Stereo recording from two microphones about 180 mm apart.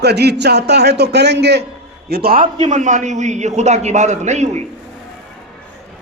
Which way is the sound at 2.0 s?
60° right (ahead or behind).